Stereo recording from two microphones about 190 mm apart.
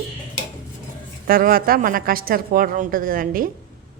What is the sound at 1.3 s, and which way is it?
Speech, 50° right (ahead or behind).